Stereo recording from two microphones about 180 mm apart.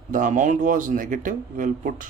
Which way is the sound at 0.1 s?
45° right (ahead or behind).